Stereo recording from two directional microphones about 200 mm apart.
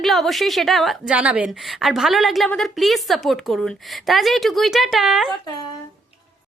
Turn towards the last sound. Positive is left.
turn(degrees=0)  # may be behind; listen again after turning